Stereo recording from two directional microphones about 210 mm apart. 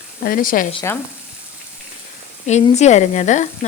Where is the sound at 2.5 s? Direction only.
30° left (ahead or behind).